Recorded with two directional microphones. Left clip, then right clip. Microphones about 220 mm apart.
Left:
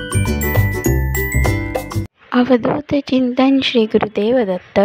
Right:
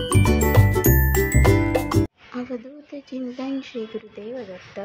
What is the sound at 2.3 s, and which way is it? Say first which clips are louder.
A woman's voice: left 18 dB; 45° left (ahead or behind).